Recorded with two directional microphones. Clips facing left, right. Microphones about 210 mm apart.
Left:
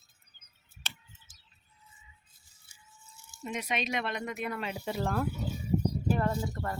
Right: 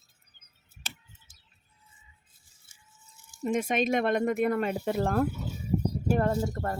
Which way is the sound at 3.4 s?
50° right (ahead or behind).